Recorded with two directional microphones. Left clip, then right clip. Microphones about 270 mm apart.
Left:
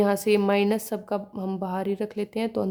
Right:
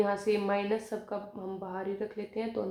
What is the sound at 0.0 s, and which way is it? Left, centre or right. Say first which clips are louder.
A woman's voice: left 7 dB; left.